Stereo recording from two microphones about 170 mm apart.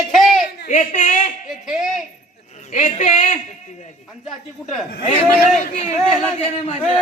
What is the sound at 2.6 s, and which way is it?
Speech, 45° left (ahead or behind).